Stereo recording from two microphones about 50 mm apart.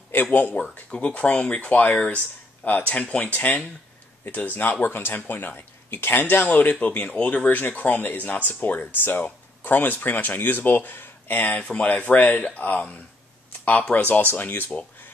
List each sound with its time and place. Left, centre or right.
0.1 s speech: left
0.8 s speech: left
13.9 s speech: left